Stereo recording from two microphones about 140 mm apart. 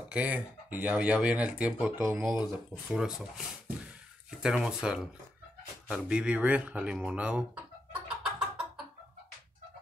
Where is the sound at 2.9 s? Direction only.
5° right (ahead or behind).